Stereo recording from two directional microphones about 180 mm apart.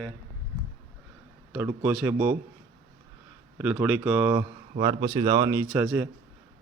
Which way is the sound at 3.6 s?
10° right (ahead or behind).